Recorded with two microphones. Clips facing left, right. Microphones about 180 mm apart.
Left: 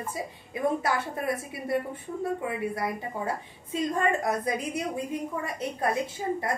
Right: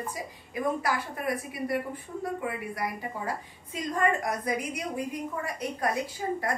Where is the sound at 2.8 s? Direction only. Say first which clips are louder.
Left 2 dB; 25° left (ahead or behind).